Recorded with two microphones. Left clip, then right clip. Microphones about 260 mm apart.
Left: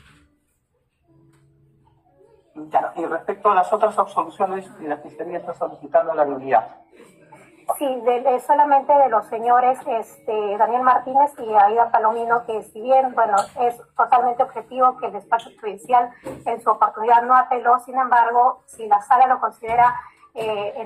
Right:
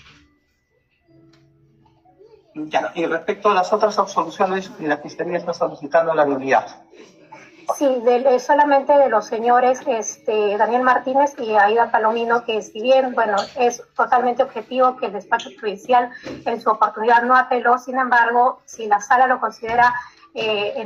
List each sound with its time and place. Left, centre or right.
3.2 s a man's voice: right
13.7 s speech: right